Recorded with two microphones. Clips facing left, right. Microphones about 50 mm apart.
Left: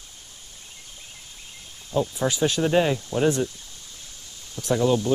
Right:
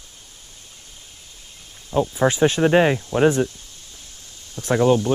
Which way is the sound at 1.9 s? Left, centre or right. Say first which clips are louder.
Right 5 dB; right.